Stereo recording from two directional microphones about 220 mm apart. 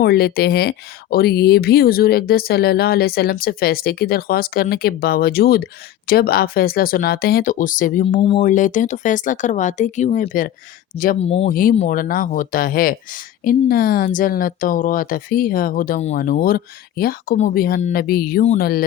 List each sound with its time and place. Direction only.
0.0 s speech: 45° left (ahead or behind)
8.0 s speech: 25° left (ahead or behind)
11.3 s speech: 25° left (ahead or behind); by 18.9 s 45° left (ahead or behind)